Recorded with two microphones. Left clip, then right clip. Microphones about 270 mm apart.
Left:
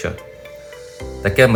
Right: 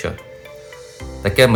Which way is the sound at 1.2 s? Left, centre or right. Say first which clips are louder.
Even; centre.